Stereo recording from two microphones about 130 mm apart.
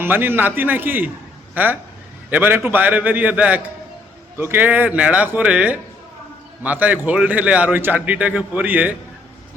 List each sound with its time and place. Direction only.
0.0 s a man's voice: 15° right (ahead or behind)